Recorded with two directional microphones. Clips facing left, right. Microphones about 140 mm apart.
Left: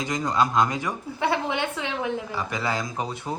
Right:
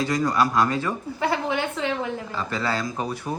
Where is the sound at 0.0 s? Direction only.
20° left (ahead or behind).